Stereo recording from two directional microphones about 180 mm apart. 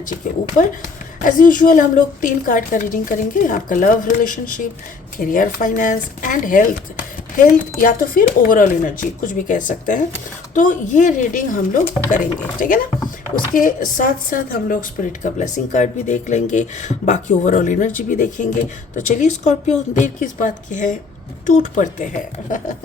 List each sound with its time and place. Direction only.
1.2 s a woman's voice: 50° left (ahead or behind)